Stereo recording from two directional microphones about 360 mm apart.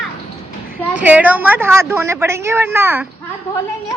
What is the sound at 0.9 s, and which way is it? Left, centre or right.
A woman's voice, centre.